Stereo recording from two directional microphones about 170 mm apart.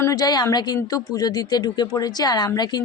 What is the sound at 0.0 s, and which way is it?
Speech, 20° left (ahead or behind).